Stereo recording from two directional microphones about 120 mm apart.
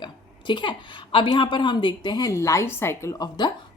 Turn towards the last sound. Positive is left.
turn(degrees=35)  # may be behind; listen again after turning